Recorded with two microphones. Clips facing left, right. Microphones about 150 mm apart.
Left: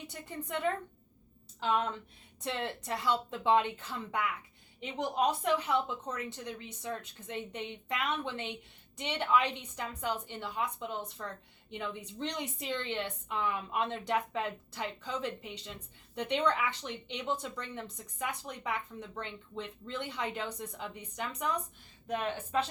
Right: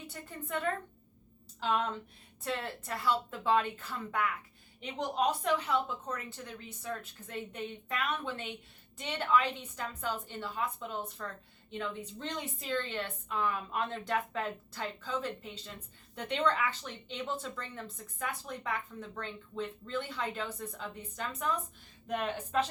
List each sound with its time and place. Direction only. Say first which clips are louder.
0.1 s speech: even; 20° left (ahead or behind)
2.4 s a woman's voice: left 1 dB; 20° left (ahead or behind)